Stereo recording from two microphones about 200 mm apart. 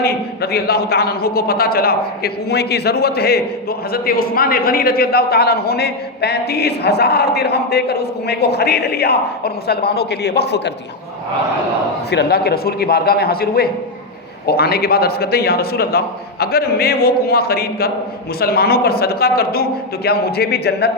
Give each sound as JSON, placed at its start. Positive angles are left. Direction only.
{"t": 0.0, "sound": "a man's voice", "side_deg": 50}
{"t": 12.1, "sound": "a man's voice", "side_deg": 50}